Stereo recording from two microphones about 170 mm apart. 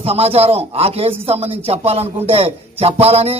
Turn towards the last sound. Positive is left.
turn(degrees=-35)  # may be behind; listen again after turning